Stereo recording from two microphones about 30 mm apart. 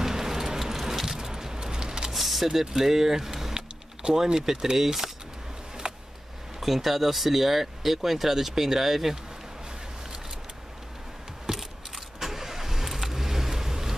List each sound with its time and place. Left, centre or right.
0.0 s a sound: centre
2.1 s vehicle: centre
2.4 s speech: centre
6.6 s speech: centre
11.5 s a sound: right
12.2 s vehicle: centre